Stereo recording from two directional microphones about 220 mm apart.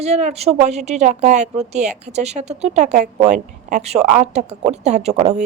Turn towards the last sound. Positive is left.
turn(degrees=-30)  # may be behind; listen again after turning